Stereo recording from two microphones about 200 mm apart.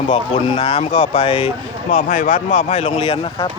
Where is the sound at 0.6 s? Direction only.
35° left (ahead or behind).